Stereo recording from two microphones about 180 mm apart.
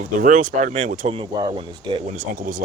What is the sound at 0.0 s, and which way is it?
Speech, 45° right (ahead or behind).